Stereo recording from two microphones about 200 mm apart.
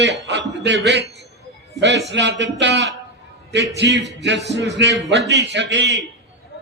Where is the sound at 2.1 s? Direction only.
60° right (ahead or behind).